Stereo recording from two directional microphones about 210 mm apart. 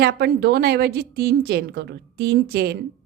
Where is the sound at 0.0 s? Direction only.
50° right (ahead or behind).